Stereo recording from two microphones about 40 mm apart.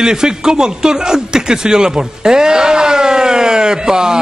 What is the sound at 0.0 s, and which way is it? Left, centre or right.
Speech, centre.